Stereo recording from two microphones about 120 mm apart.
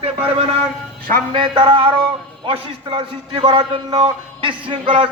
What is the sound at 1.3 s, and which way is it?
A man's voice, 45° right (ahead or behind).